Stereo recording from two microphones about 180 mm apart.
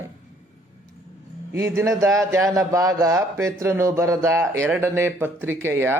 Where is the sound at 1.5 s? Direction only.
15° right (ahead or behind).